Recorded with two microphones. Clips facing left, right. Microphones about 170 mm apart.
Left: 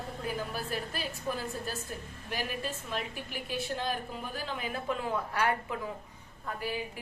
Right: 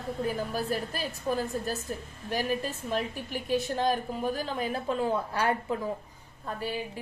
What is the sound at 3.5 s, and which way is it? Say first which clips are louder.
A woman's voice: right 7 dB; 40° right (ahead or behind).